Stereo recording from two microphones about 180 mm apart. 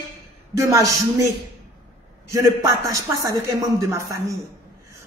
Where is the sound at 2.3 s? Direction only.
20° right (ahead or behind).